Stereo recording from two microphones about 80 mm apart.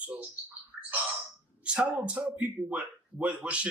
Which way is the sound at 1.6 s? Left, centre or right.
Centre.